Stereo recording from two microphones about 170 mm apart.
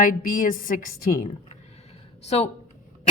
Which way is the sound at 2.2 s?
40° left (ahead or behind).